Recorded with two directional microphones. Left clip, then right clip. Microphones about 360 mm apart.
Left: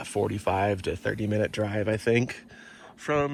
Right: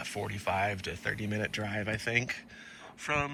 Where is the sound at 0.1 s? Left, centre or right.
Left.